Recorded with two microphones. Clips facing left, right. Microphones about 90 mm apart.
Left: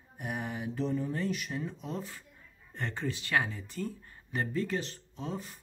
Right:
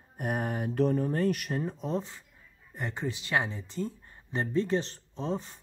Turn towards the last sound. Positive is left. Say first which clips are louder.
# right 5 dB
turn(degrees=-30)  # may be behind; listen again after turning